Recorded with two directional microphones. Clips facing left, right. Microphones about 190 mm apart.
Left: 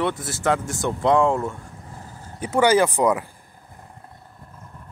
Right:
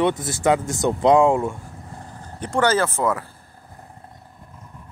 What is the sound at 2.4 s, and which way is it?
Speech, 10° left (ahead or behind).